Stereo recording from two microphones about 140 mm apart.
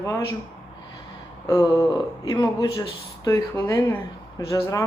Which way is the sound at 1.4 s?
25° left (ahead or behind).